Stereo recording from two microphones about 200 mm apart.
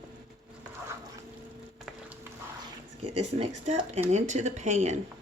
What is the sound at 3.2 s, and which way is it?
Speech, 30° right (ahead or behind).